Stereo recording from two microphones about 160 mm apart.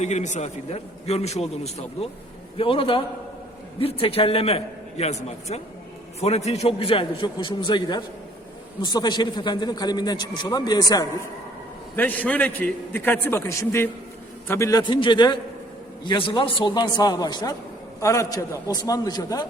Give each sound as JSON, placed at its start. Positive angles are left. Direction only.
{"t": 0.0, "sound": "a man's voice", "side_deg": 45}
{"t": 11.9, "sound": "a man's voice", "side_deg": 10}